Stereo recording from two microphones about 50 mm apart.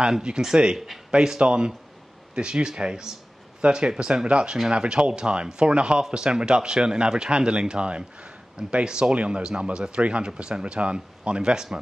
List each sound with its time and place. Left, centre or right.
0.1 s speech: centre